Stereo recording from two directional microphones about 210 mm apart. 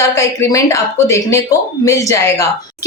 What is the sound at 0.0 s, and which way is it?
A woman's voice, 15° left (ahead or behind).